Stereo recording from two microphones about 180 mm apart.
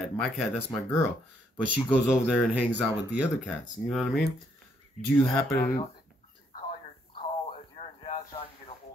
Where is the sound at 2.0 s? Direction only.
5° right (ahead or behind).